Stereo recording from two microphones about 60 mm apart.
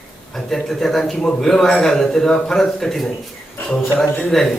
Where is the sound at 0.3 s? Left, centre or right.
Centre.